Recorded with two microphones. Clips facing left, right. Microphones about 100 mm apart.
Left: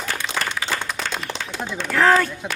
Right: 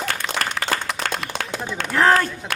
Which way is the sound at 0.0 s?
55° right (ahead or behind).